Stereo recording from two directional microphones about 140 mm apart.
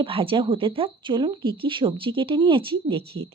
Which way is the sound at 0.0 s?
40° right (ahead or behind).